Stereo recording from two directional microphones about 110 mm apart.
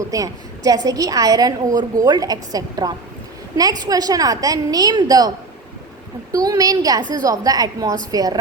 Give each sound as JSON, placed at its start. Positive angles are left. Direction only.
{"t": 0.1, "sound": "a woman's voice", "side_deg": -30}
{"t": 6.3, "sound": "a woman's voice", "side_deg": -35}